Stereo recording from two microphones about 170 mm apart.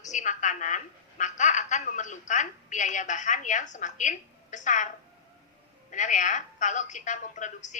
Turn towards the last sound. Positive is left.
turn(degrees=45)  # may be behind; listen again after turning